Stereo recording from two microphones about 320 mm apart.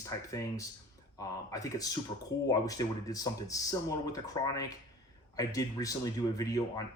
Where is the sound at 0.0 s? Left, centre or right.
Centre.